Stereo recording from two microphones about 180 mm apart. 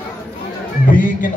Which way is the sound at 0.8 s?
45° left (ahead or behind).